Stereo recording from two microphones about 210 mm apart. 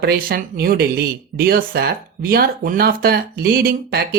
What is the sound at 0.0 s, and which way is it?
Speech, 45° right (ahead or behind).